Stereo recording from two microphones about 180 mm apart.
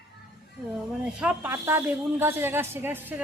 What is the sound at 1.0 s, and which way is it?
A woman's voice, 5° right (ahead or behind).